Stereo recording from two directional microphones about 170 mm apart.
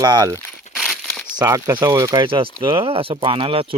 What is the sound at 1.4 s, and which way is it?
Speech, 20° right (ahead or behind).